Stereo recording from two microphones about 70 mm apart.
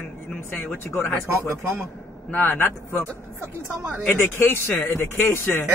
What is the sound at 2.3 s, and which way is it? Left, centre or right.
Speech, left.